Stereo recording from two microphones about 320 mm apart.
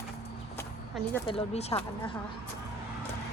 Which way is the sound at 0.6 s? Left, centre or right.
Centre.